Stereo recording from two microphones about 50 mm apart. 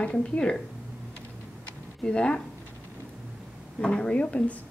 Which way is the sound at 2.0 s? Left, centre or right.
Centre.